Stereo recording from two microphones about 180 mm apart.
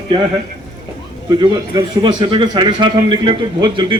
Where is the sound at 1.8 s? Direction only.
25° right (ahead or behind).